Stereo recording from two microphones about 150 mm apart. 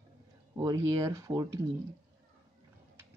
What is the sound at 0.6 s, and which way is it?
Speech, 25° right (ahead or behind).